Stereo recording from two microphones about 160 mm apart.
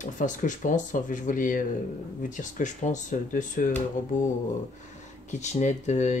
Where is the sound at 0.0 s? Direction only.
55° left (ahead or behind).